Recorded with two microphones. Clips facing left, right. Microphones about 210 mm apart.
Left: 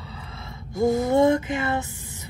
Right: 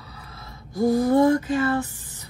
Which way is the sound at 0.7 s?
25° left (ahead or behind).